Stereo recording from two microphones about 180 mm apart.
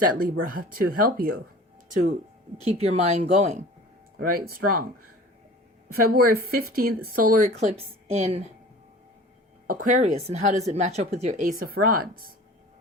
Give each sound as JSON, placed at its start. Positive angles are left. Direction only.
{"t": 0.0, "sound": "speech", "side_deg": -50}
{"t": 1.9, "sound": "a woman's voice", "side_deg": -40}
{"t": 4.2, "sound": "speech", "side_deg": -55}
{"t": 5.9, "sound": "speech", "side_deg": -55}
{"t": 9.6, "sound": "a woman's voice", "side_deg": -50}
{"t": 11.6, "sound": "speech", "side_deg": -55}